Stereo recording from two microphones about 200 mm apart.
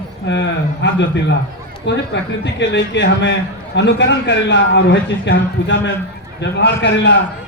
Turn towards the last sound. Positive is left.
turn(degrees=60)  # may be behind; listen again after turning